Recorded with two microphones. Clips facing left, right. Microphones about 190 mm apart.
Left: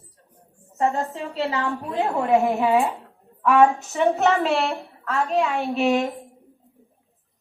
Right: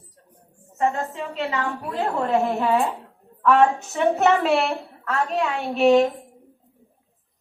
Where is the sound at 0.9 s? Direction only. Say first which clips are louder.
Left 1 dB; 35° left (ahead or behind).